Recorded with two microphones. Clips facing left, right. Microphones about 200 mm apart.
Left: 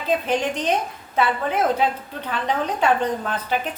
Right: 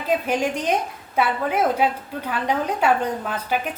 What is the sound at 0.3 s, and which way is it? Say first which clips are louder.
A woman's voice: even; 10° right (ahead or behind).